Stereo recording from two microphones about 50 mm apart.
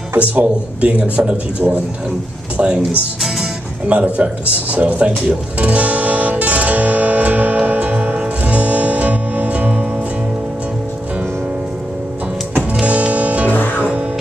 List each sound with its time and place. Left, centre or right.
0.3 s speech: right
5.3 s guitar: right
12.8 s music: right
13.5 s music: left
13.7 s music: right